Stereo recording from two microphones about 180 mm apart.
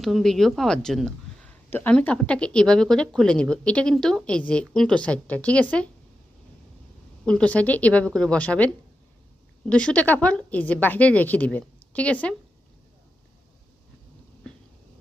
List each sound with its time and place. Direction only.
0.0 s speech: centre (ahead or behind)
7.3 s a woman's voice: 5° left (ahead or behind)